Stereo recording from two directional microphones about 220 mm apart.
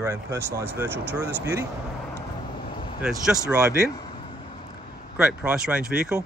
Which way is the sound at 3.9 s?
20° left (ahead or behind).